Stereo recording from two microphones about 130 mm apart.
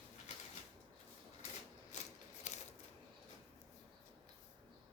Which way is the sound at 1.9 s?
65° left (ahead or behind).